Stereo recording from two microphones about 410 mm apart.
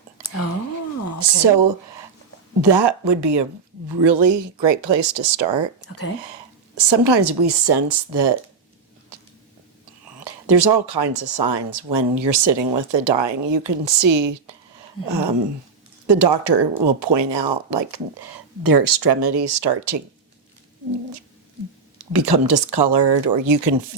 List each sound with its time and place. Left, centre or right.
1.2 s speech: right
2.6 s a woman's voice: right
10.2 s speech: right
16.0 s speech: right
22.1 s speech: right